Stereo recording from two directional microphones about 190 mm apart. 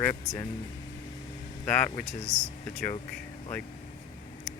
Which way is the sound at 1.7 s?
10° left (ahead or behind).